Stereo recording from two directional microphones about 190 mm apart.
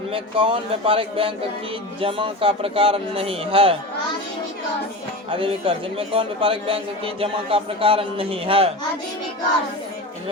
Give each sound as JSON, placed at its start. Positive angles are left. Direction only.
{"t": 0.1, "sound": "a man's voice", "side_deg": -30}
{"t": 5.3, "sound": "a man's voice", "side_deg": -30}